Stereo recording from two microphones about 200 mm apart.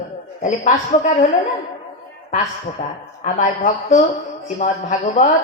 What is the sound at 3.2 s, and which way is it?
A woman's voice, 40° left (ahead or behind).